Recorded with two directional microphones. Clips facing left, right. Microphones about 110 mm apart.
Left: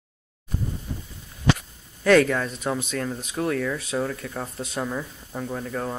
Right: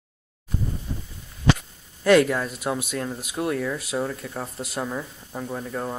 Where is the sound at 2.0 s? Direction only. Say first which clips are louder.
Even; 10° right (ahead or behind).